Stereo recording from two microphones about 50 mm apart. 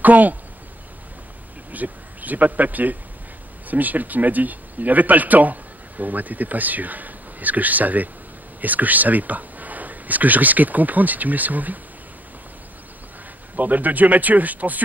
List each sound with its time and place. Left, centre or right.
0.0 s speech: right
1.7 s a man's voice: right
13.6 s speech: right